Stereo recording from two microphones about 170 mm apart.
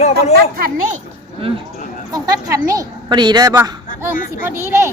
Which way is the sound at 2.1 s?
20° right (ahead or behind).